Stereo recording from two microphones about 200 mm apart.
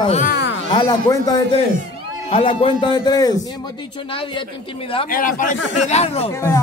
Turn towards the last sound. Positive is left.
turn(degrees=15)  # may be behind; listen again after turning